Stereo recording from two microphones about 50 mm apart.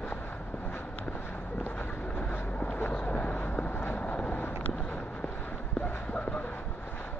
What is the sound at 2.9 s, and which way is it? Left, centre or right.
Vehicle, left.